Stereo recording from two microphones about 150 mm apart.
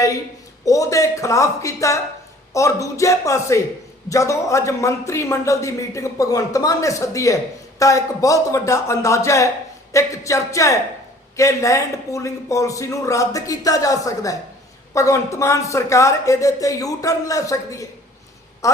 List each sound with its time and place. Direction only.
0.6 s a man's voice: 20° left (ahead or behind)